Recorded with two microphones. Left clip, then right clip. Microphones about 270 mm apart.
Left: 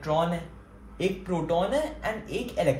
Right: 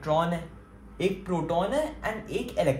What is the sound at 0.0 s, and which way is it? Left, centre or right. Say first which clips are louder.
Speech: even; right.